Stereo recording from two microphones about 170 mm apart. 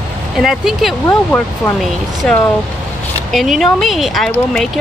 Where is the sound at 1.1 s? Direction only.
15° left (ahead or behind).